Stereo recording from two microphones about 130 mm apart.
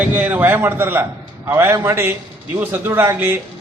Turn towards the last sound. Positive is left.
turn(degrees=-15)  # may be behind; listen again after turning